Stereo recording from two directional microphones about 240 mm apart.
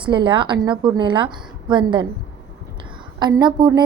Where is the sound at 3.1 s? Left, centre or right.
Centre.